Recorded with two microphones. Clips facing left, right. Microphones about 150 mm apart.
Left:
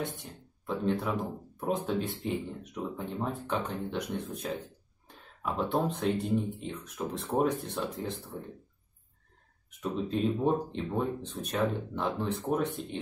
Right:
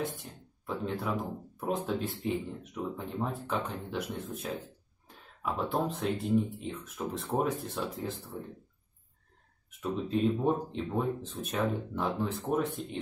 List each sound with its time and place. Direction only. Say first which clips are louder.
0.0 s speech: right 1 dB; centre (ahead or behind)
9.7 s speech: even; centre (ahead or behind)